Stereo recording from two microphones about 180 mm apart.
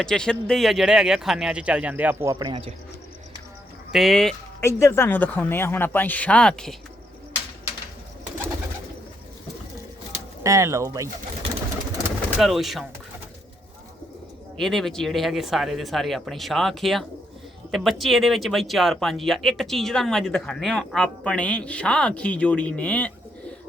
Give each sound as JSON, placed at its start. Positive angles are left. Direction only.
{"t": 0.0, "sound": "speech", "side_deg": 5}
{"t": 2.3, "sound": "speech", "side_deg": -25}
{"t": 3.9, "sound": "speech", "side_deg": 0}
{"t": 4.6, "sound": "speech", "side_deg": 15}
{"t": 10.4, "sound": "speech", "side_deg": -15}
{"t": 12.4, "sound": "speech", "side_deg": 0}
{"t": 14.6, "sound": "speech", "side_deg": 0}